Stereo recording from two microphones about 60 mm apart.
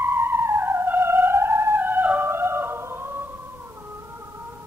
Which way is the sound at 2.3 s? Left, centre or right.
Right.